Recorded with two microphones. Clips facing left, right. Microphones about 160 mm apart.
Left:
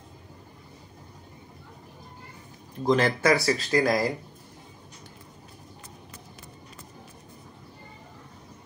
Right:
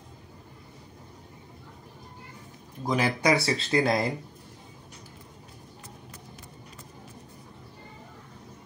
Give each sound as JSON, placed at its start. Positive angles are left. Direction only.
{"t": 2.9, "sound": "speech", "side_deg": -15}